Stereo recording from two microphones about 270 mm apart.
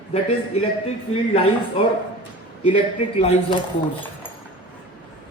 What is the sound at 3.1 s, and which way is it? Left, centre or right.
Speech, left.